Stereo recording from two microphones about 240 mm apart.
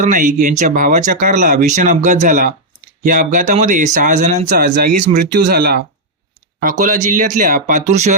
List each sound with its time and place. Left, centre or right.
0.0 s speech: right
6.8 s speech: right